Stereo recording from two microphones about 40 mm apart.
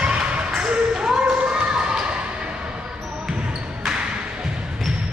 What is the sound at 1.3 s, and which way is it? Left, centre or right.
Basketball bounce, right.